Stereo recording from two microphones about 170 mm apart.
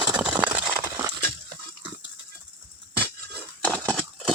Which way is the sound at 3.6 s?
5° left (ahead or behind).